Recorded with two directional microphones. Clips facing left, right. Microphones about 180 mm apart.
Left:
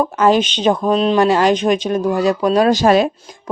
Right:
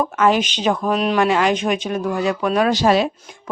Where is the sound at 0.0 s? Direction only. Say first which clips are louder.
Left 3 dB; 35° left (ahead or behind).